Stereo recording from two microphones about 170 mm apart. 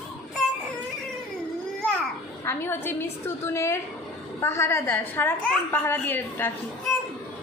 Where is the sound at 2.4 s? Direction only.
15° left (ahead or behind).